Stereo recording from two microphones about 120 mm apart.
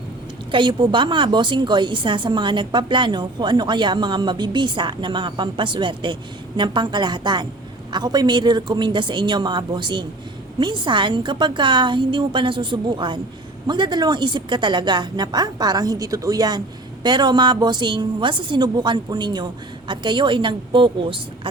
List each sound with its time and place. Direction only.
0.5 s a woman's voice: 40° right (ahead or behind)